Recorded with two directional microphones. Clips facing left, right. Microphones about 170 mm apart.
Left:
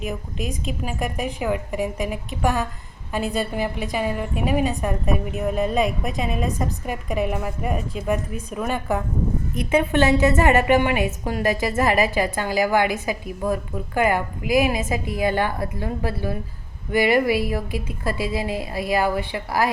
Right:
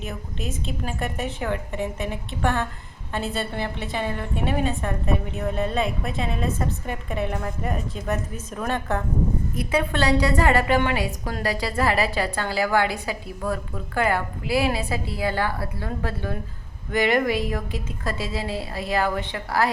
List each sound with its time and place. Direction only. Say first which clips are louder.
0.0 s a woman's voice: left 4 dB; 15° left (ahead or behind)
9.6 s a woman's voice: left 5 dB; 20° left (ahead or behind)